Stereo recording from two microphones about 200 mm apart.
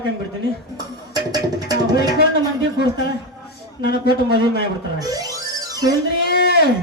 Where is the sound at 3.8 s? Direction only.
55° left (ahead or behind).